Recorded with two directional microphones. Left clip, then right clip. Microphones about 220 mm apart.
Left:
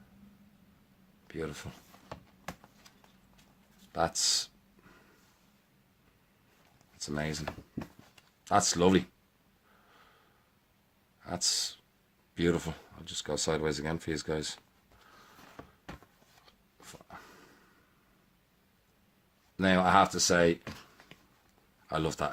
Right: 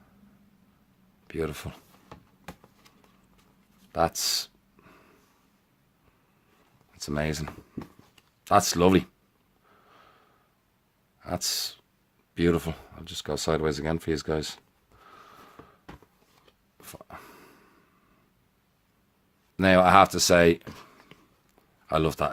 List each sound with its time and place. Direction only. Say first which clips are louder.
1.3 s speech: right 7 dB; 35° right (ahead or behind)
3.9 s speech: right 4 dB; 30° right (ahead or behind)
4.8 s a sound: right 5 dB; 30° right (ahead or behind)
7.0 s speech: right 6 dB; 35° right (ahead or behind)
8.4 s speech: right 5 dB; 30° right (ahead or behind)
11.2 s speech: right 2 dB; 30° right (ahead or behind)
15.6 s a sound: even; 15° left (ahead or behind)
16.8 s dog: right 5 dB; 30° right (ahead or behind)
19.5 s speech: right 7 dB; 35° right (ahead or behind)
21.8 s speech: right 7 dB; 30° right (ahead or behind)